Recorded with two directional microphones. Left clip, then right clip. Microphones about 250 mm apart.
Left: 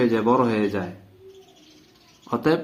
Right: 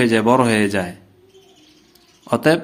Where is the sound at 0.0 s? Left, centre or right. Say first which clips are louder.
Right 5 dB; right.